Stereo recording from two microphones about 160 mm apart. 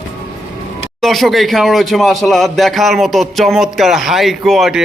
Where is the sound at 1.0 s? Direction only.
Centre (ahead or behind).